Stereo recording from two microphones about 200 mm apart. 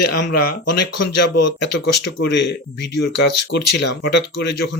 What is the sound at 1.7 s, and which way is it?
Speech, 60° left (ahead or behind).